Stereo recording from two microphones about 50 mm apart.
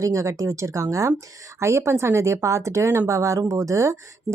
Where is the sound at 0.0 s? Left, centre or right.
Right.